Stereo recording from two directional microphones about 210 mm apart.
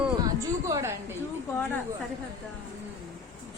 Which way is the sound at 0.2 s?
15° right (ahead or behind).